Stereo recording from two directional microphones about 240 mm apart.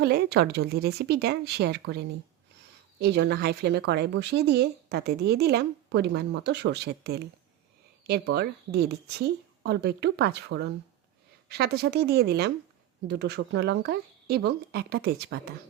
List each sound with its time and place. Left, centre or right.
0.0 s speech: right